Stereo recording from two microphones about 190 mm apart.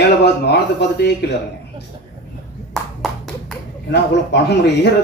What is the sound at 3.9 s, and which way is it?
Speech, 60° left (ahead or behind).